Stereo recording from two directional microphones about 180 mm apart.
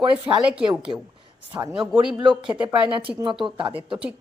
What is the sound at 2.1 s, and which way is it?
Speech, 5° right (ahead or behind).